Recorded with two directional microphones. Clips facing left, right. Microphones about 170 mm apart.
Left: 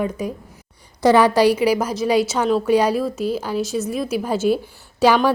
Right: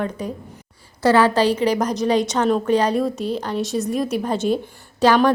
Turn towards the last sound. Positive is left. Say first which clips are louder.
# even
turn(degrees=10)  # may be behind; listen again after turning